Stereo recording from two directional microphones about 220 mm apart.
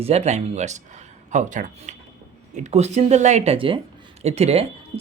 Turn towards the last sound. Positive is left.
turn(degrees=-25)  # may be behind; listen again after turning